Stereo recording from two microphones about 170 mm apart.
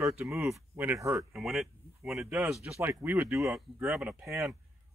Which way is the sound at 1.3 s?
Centre (ahead or behind).